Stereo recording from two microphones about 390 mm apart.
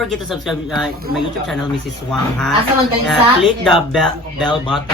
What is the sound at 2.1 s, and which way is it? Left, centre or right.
A man's voice, centre.